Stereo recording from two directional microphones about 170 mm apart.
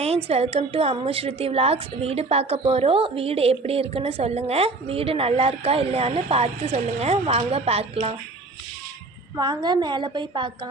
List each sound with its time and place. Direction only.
0.0 s a woman's voice: 35° right (ahead or behind)
9.3 s a woman's voice: 25° right (ahead or behind)